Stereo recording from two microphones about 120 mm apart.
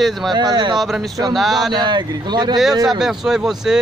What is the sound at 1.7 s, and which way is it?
Speech, 40° right (ahead or behind).